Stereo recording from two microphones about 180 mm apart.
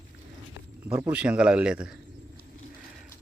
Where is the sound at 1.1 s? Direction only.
5° right (ahead or behind).